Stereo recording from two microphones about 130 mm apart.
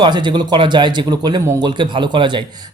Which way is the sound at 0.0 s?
35° right (ahead or behind).